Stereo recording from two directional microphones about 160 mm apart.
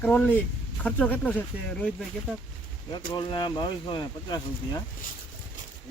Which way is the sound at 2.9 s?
30° left (ahead or behind).